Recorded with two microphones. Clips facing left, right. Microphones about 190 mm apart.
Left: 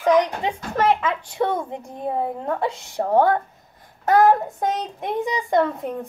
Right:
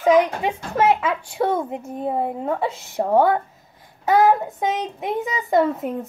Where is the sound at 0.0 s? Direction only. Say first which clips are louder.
Right 2 dB; 5° right (ahead or behind).